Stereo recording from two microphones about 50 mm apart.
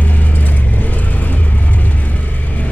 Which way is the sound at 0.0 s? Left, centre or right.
Left.